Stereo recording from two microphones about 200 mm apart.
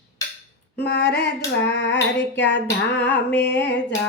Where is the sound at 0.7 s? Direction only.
60° left (ahead or behind).